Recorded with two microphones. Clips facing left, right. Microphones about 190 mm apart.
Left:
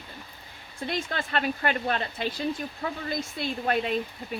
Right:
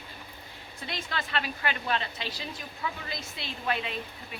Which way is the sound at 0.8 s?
50° left (ahead or behind).